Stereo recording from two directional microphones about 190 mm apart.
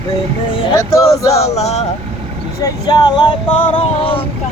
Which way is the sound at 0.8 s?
15° left (ahead or behind).